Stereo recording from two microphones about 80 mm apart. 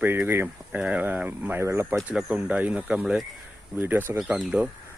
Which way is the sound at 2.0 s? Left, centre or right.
Centre.